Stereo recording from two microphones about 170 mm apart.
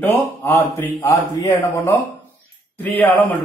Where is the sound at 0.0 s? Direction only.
10° left (ahead or behind).